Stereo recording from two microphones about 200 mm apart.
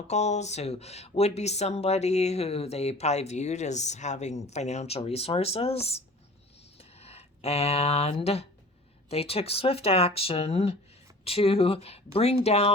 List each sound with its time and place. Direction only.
0.1 s speech: 35° left (ahead or behind)
7.0 s speech: 30° left (ahead or behind)